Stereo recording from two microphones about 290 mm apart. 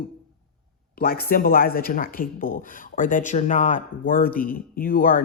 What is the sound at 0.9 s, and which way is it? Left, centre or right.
Speech, left.